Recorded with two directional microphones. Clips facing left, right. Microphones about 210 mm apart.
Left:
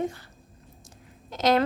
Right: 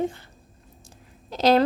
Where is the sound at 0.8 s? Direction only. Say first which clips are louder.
Right 3 dB; 30° right (ahead or behind).